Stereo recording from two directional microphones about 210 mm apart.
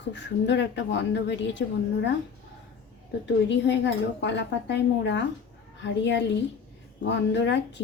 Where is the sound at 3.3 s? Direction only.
60° left (ahead or behind).